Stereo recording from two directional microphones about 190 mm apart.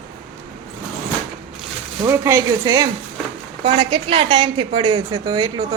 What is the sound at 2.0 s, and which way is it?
A woman's voice, 15° right (ahead or behind).